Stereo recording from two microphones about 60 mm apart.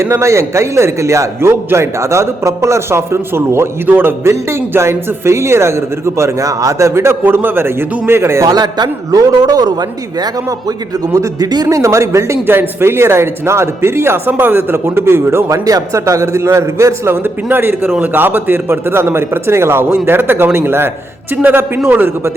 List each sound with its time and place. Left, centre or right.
0.0 s a man's voice: right
6.6 s a man's voice: right
9.1 s a man's voice: right
11.1 s a man's voice: right
12.5 s a man's voice: right
14.9 s a man's voice: right
17.2 s a man's voice: right